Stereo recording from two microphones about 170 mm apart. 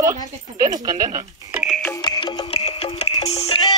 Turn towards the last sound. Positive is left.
turn(degrees=35)  # may be behind; listen again after turning